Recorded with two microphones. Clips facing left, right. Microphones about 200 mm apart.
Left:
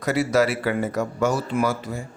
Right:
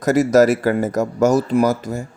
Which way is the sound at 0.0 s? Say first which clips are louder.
Right 7 dB; 45° right (ahead or behind).